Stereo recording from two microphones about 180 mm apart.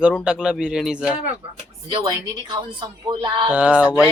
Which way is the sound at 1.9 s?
20° right (ahead or behind).